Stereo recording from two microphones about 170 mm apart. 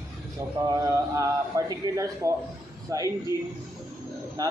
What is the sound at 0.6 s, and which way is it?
A man's voice, 20° right (ahead or behind).